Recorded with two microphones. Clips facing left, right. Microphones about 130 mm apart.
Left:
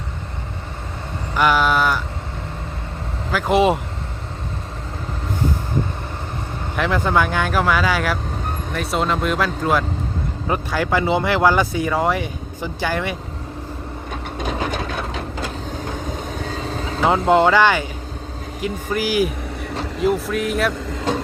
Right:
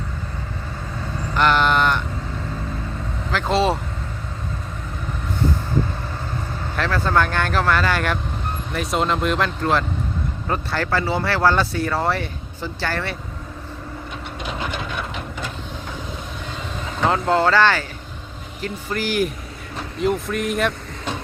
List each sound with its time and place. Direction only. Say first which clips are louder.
1.4 s speech: left 1 dB; 5° left (ahead or behind)
3.3 s speech: left 3 dB; 15° left (ahead or behind)
6.7 s speech: left 2 dB; 15° left (ahead or behind)
14.3 s wood: left 4 dB; 40° left (ahead or behind)
16.0 s vehicle: left 5 dB; 40° left (ahead or behind)
17.1 s speech: left 3 dB; 20° left (ahead or behind); by 20.7 s centre (ahead or behind)